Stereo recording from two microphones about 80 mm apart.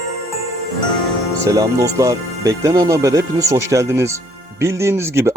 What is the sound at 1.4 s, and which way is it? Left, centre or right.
Speech, right.